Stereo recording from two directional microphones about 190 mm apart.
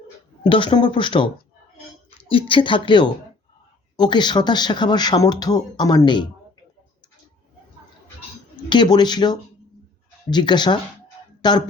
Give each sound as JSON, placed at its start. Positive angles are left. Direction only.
{"t": 0.4, "sound": "speech", "side_deg": 25}
{"t": 2.3, "sound": "speech", "side_deg": 25}
{"t": 8.7, "sound": "speech", "side_deg": 25}